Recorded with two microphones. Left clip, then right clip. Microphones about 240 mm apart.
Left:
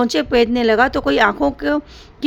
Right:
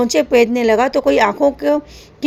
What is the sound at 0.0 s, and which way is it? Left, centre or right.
Speech, centre.